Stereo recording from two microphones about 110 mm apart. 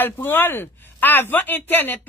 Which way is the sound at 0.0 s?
20° left (ahead or behind).